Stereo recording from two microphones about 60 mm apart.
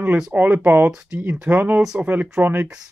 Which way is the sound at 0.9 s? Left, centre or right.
Centre.